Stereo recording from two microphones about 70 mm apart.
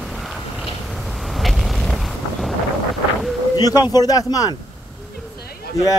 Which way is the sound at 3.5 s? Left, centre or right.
Left.